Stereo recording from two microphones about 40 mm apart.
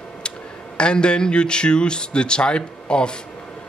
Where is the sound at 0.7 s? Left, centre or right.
Left.